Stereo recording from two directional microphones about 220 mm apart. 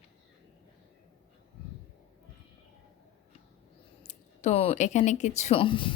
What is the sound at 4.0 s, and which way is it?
Speech, 30° left (ahead or behind).